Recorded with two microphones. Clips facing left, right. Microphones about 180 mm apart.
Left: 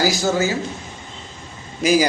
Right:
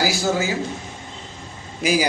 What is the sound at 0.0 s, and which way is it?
Speech, 10° right (ahead or behind).